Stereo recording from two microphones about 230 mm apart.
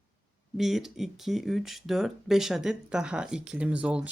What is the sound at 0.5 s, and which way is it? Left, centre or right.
Speech, centre.